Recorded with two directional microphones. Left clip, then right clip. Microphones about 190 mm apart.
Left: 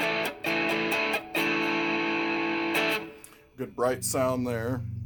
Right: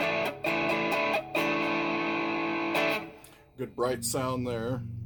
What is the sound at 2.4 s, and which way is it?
Music, 40° right (ahead or behind).